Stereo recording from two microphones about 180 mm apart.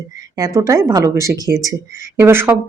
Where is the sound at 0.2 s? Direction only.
20° right (ahead or behind).